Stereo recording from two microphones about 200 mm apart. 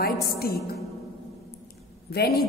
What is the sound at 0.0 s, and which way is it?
Speech, 50° left (ahead or behind).